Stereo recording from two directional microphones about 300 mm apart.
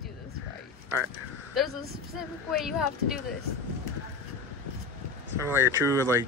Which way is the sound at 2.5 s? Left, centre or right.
Centre.